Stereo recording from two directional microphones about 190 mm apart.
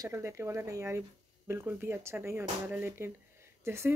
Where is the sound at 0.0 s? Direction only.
15° right (ahead or behind).